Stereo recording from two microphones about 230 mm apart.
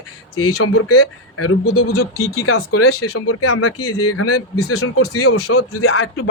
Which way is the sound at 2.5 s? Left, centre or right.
Left.